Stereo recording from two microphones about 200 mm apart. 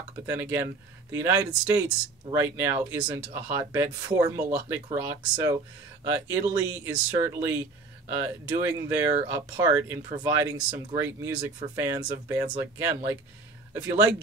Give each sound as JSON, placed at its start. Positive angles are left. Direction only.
{"t": 0.3, "sound": "speech", "side_deg": -10}